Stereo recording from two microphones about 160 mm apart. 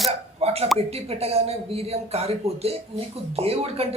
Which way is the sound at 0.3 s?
40° right (ahead or behind).